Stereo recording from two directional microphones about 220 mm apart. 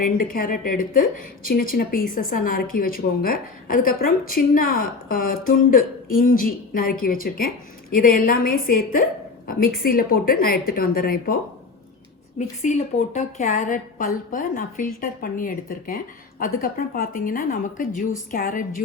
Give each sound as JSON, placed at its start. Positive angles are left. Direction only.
{"t": 0.0, "sound": "a woman's voice", "side_deg": 40}
{"t": 12.4, "sound": "a woman's voice", "side_deg": 35}